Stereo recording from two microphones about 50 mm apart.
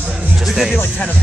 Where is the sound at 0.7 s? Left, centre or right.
Left.